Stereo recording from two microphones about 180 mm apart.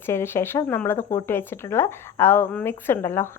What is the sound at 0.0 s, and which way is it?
Speech, 15° left (ahead or behind).